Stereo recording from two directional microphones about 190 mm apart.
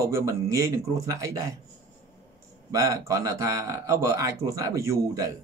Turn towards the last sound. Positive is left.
turn(degrees=-15)  # may be behind; listen again after turning